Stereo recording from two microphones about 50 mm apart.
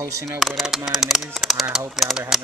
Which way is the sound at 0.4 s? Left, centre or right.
Centre.